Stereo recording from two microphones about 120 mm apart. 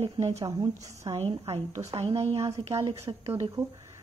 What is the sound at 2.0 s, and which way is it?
Speech, 60° right (ahead or behind).